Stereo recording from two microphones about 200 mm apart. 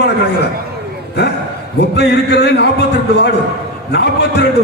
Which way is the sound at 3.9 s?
55° left (ahead or behind).